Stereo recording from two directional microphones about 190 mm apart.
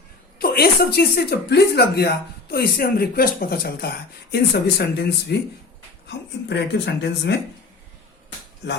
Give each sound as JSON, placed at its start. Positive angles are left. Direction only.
{"t": 0.3, "sound": "speech", "side_deg": 55}